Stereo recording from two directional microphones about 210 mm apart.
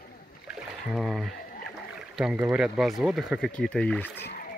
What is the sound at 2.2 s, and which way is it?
Speech, 5° right (ahead or behind).